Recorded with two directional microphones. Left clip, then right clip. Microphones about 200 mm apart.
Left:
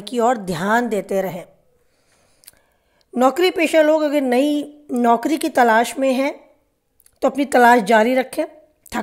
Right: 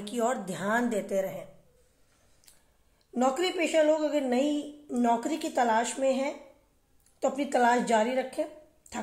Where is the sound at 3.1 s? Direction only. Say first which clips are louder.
Left 11 dB; 50° left (ahead or behind).